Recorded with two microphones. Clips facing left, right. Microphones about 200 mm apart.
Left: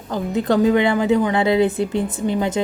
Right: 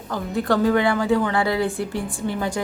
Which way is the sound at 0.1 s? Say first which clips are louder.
Left 3 dB; 20° left (ahead or behind).